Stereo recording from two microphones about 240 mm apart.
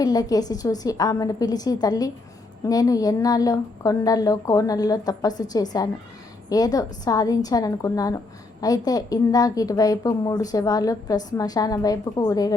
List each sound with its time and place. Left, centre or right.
0.0 s a woman's voice: centre